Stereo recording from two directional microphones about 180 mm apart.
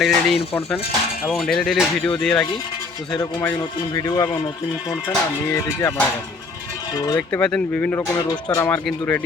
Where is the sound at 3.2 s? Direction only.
20° left (ahead or behind).